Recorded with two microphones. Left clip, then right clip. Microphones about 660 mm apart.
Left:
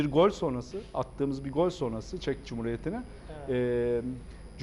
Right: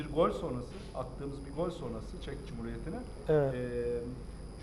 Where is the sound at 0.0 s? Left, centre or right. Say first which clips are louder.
Left 6 dB; left.